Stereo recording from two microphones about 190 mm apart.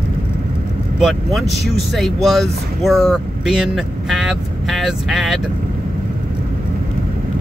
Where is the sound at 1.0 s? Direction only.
Centre (ahead or behind).